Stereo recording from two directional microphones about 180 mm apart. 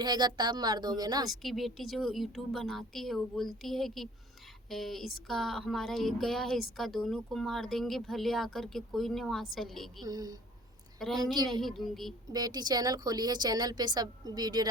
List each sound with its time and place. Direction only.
0.0 s speech: 25° right (ahead or behind)
1.3 s speech: centre (ahead or behind)
10.0 s speech: 20° right (ahead or behind)
11.0 s speech: centre (ahead or behind)
12.3 s speech: 20° right (ahead or behind)